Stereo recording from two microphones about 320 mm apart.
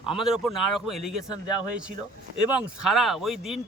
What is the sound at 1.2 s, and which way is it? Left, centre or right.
Speech, centre.